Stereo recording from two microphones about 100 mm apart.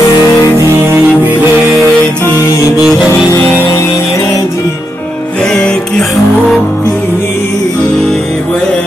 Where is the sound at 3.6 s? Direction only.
35° left (ahead or behind).